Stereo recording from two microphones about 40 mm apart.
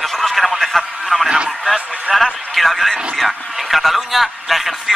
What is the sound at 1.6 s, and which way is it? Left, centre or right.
A man's voice, centre.